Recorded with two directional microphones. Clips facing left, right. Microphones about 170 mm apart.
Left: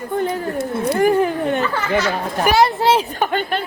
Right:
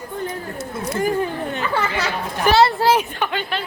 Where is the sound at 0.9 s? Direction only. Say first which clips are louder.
Left 5 dB; 60° left (ahead or behind).